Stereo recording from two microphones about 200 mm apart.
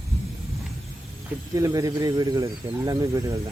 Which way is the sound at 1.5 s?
15° right (ahead or behind).